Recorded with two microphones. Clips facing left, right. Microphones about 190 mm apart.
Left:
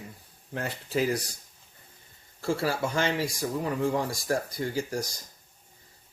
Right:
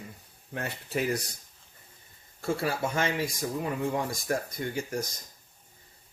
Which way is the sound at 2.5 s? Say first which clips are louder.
Left 1 dB; 30° left (ahead or behind).